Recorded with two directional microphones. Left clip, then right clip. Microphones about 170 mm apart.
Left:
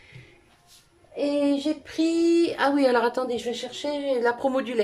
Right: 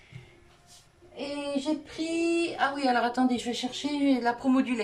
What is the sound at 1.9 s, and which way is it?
A woman's voice, 60° left (ahead or behind).